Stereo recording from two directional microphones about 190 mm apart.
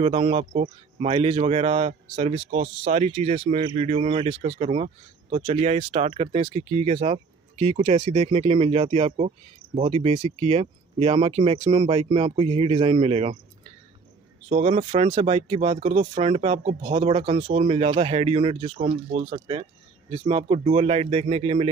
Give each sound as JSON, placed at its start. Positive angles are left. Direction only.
{"t": 0.0, "sound": "a man's voice", "side_deg": -30}
{"t": 14.5, "sound": "speech", "side_deg": -35}